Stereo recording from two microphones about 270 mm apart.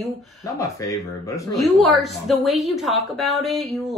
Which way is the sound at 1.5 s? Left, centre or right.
Centre.